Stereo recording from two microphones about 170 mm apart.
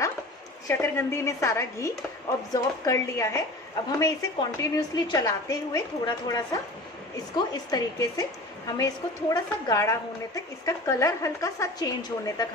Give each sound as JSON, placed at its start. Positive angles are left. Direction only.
{"t": 0.7, "sound": "a woman's voice", "side_deg": 15}